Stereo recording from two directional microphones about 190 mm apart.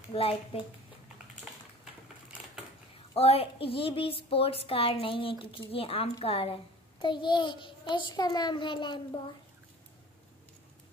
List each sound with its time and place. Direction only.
0.1 s a woman's voice: 30° left (ahead or behind)
3.2 s a woman's voice: 30° left (ahead or behind)